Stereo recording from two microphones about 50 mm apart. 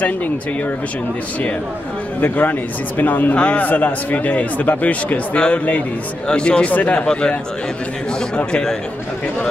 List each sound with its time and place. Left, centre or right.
2.1 s a man's voice: left
3.3 s a man's voice: left
6.2 s speech: centre
8.5 s speech: centre